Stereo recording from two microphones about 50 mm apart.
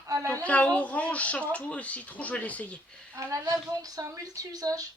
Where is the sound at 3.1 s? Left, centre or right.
Right.